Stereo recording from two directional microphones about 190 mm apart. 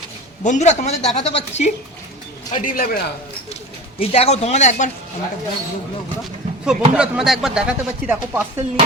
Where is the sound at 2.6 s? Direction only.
45° left (ahead or behind).